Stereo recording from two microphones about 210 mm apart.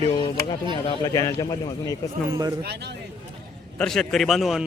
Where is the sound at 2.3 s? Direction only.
20° right (ahead or behind).